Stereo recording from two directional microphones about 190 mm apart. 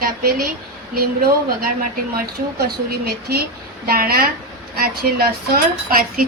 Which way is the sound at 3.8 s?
50° right (ahead or behind).